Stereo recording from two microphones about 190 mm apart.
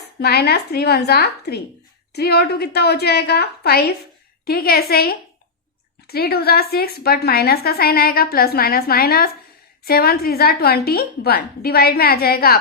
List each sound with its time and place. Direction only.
0.2 s a woman's voice: 60° left (ahead or behind)